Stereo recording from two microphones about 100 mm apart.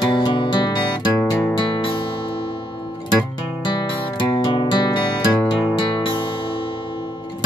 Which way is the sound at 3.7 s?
50° left (ahead or behind).